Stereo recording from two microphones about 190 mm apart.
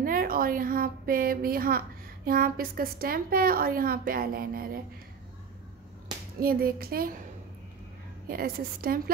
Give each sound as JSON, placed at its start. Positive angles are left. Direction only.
{"t": 0.0, "sound": "a woman's voice", "side_deg": -50}
{"t": 6.4, "sound": "a woman's voice", "side_deg": -50}
{"t": 8.3, "sound": "a woman's voice", "side_deg": -50}